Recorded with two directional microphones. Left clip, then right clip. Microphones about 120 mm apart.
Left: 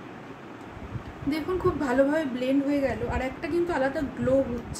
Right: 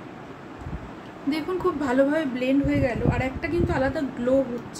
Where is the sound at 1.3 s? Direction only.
Centre (ahead or behind).